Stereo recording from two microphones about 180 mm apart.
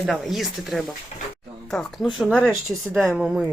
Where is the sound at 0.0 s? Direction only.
Centre (ahead or behind).